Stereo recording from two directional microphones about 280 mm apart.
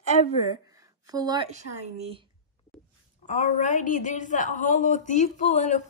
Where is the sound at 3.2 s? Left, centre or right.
Left.